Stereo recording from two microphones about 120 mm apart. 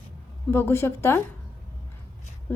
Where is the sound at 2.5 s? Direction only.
20° left (ahead or behind).